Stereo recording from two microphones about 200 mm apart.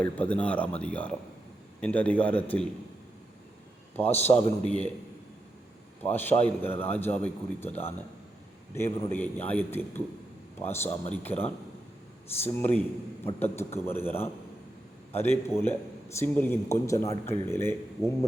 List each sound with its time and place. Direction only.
0.0 s a man's voice: 5° left (ahead or behind)
4.3 s a man's voice: 20° left (ahead or behind)
4.6 s a man's voice: 35° left (ahead or behind)
6.0 s a man's voice: 10° left (ahead or behind)
8.7 s a man's voice: 10° left (ahead or behind)